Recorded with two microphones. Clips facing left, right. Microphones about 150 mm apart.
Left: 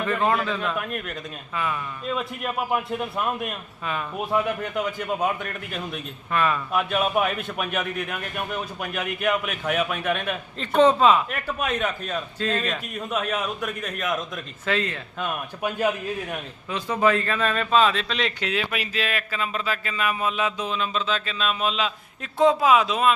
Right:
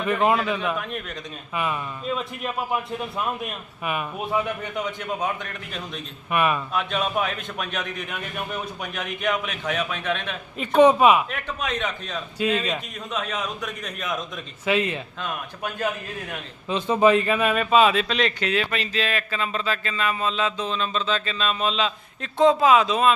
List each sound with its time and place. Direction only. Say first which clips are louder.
0.0 s a man's voice: right 2 dB; 15° right (ahead or behind)
0.8 s speech: left 1 dB; 5° left (ahead or behind)
1.5 s a man's voice: right 1 dB; 20° right (ahead or behind)
2.1 s speech: left 3 dB; centre (ahead or behind)
4.3 s speech: left 2 dB; centre (ahead or behind)
6.3 s a man's voice: right 1 dB; 15° right (ahead or behind)
6.7 s speech: left 2 dB; 5° left (ahead or behind)
10.8 s a man's voice: right 2 dB; 15° right (ahead or behind)
11.3 s speech: left 2 dB; 5° left (ahead or behind)
12.4 s a man's voice: right 4 dB; 15° right (ahead or behind)
13.1 s speech: left 2 dB; 5° left (ahead or behind)
14.6 s a man's voice: right 3 dB; 15° right (ahead or behind)
15.2 s speech: left 7 dB; 10° left (ahead or behind)
16.6 s speech: right 4 dB; 25° right (ahead or behind); by 23.1 s 5° left (ahead or behind)